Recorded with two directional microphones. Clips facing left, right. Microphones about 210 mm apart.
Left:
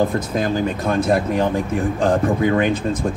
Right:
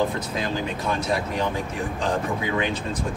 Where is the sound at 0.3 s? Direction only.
45° left (ahead or behind).